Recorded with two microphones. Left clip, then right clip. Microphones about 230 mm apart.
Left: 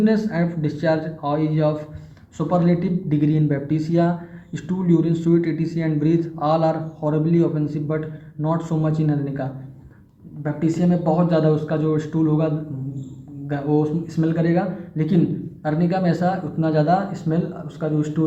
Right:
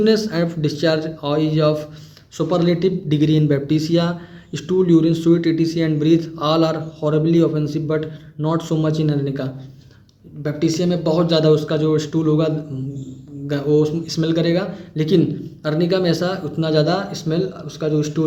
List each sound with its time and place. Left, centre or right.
0.0 s a man's voice: right
13.5 s a man's voice: right